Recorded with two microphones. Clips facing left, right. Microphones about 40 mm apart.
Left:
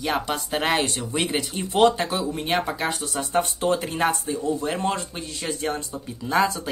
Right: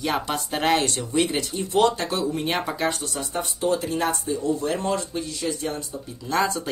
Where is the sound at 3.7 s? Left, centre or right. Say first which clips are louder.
Left 1 dB; left.